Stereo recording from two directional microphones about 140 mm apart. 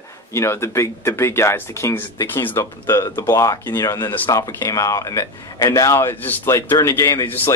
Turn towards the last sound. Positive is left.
turn(degrees=15)  # may be behind; listen again after turning